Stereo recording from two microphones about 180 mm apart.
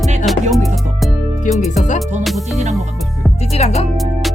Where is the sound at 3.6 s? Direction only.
40° left (ahead or behind).